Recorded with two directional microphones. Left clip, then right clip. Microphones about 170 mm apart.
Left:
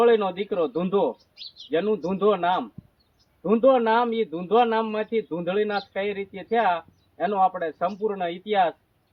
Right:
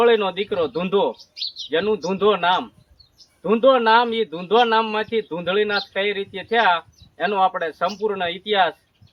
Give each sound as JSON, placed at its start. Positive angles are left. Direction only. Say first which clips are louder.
{"t": 0.0, "sound": "a man's voice", "louder": "right 3 dB", "side_deg": -20}